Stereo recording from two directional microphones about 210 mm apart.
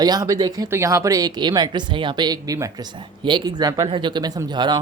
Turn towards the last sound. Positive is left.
turn(degrees=-20)  # may be behind; listen again after turning